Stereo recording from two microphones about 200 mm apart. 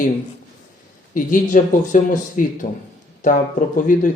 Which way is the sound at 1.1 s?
40° left (ahead or behind).